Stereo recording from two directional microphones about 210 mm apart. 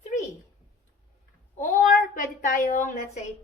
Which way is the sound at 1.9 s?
40° left (ahead or behind).